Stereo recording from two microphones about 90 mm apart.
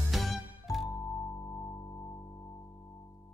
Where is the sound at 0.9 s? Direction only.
35° left (ahead or behind).